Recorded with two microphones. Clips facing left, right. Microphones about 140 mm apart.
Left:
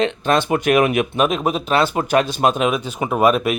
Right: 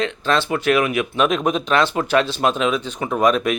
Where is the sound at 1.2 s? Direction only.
5° left (ahead or behind).